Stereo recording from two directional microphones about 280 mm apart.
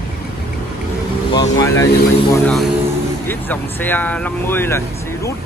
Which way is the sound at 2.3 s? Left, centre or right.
Centre.